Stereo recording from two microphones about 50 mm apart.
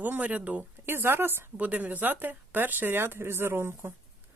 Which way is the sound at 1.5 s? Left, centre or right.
Right.